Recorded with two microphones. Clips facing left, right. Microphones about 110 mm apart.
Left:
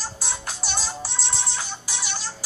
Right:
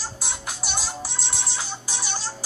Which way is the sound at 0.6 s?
Centre (ahead or behind).